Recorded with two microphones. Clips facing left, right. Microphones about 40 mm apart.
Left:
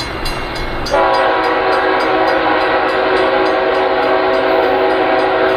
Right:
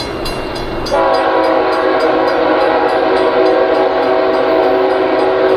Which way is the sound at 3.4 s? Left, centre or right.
Centre.